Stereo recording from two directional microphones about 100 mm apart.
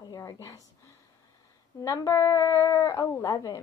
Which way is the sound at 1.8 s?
35° left (ahead or behind).